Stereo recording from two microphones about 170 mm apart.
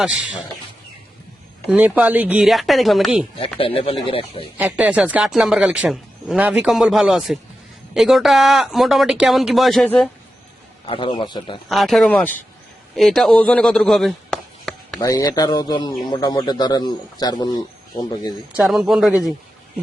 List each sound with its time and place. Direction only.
0.0 s speech: 5° right (ahead or behind)
1.6 s speech: 10° right (ahead or behind)
3.6 s speech: 35° left (ahead or behind)
4.5 s speech: 10° right (ahead or behind)
10.8 s a man's voice: 30° left (ahead or behind)
11.7 s speech: centre (ahead or behind)
15.0 s a man's voice: 20° left (ahead or behind)
18.5 s speech: centre (ahead or behind)